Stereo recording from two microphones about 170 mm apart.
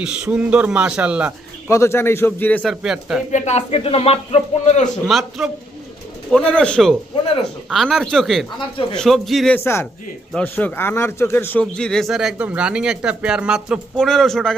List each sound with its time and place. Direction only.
0.0 s a man's voice: 5° right (ahead or behind)
1.7 s a man's voice: 15° left (ahead or behind)
2.8 s speech: 5° right (ahead or behind)
3.3 s a man's voice: 40° left (ahead or behind)
5.0 s speech: centre (ahead or behind)
8.7 s a man's voice: 30° left (ahead or behind)
9.0 s speech: centre (ahead or behind)